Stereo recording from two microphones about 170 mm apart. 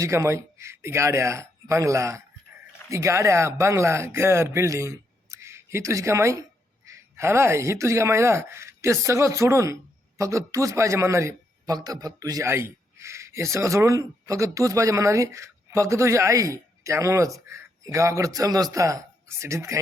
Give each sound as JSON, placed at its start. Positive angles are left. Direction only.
{"t": 0.0, "sound": "a man's voice", "side_deg": -15}